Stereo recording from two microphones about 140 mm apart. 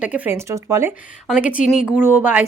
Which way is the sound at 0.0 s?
10° right (ahead or behind).